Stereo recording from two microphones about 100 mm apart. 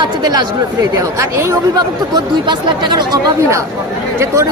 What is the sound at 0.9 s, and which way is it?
Speech, 25° right (ahead or behind).